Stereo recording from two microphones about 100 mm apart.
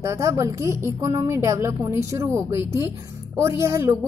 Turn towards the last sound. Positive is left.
turn(degrees=-30)  # may be behind; listen again after turning